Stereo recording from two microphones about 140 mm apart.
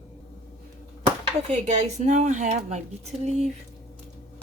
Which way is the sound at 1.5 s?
55° right (ahead or behind).